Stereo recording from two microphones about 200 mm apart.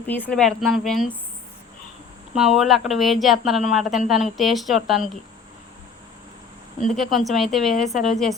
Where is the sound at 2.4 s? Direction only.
5° right (ahead or behind).